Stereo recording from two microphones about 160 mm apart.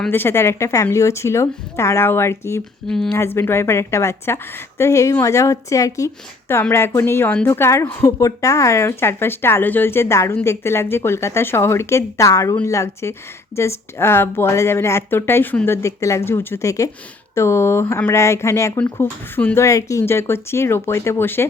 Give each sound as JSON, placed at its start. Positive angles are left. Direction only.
{"t": 0.1, "sound": "a woman's voice", "side_deg": 15}
{"t": 2.8, "sound": "speech", "side_deg": 5}
{"t": 3.2, "sound": "a woman's voice", "side_deg": 15}